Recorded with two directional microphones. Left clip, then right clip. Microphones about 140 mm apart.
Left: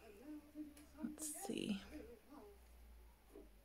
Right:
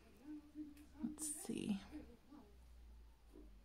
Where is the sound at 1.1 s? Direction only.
20° right (ahead or behind).